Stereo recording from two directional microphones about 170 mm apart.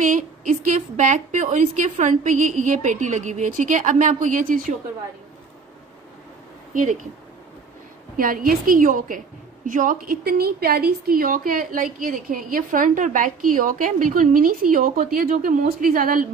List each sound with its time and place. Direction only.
0.0 s a sound: 50° right (ahead or behind)
0.7 s a woman's voice: 45° right (ahead or behind)
6.7 s speech: 45° right (ahead or behind)
8.2 s a woman's voice: 55° right (ahead or behind)